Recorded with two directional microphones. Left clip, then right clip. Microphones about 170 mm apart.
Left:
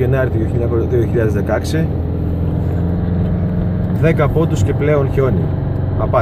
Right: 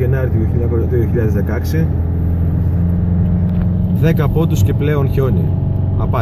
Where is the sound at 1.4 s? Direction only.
Centre (ahead or behind).